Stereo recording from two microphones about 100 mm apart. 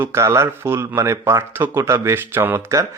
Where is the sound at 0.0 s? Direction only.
25° right (ahead or behind).